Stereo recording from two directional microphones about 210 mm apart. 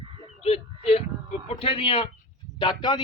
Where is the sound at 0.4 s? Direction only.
30° left (ahead or behind).